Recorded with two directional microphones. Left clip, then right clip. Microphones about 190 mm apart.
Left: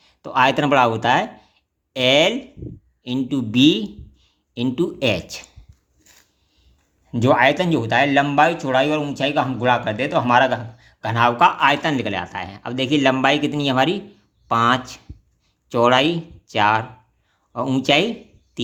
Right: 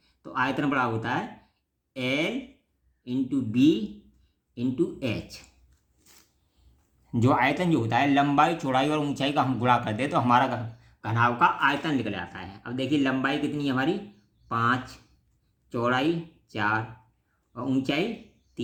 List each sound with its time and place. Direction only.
0.0 s speech: 45° left (ahead or behind)
7.1 s speech: 20° left (ahead or behind); by 18.1 s 45° left (ahead or behind)